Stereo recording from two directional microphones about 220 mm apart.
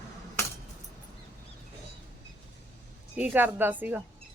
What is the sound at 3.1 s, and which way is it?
Speech, 5° right (ahead or behind).